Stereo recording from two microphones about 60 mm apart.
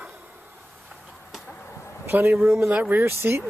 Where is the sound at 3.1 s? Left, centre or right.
Right.